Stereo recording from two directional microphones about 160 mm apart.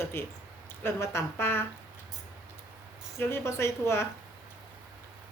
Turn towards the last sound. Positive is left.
turn(degrees=15)  # may be behind; listen again after turning